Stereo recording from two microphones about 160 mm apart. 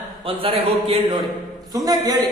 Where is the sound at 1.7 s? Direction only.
20° right (ahead or behind).